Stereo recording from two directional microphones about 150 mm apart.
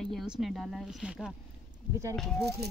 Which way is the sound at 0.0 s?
Centre (ahead or behind).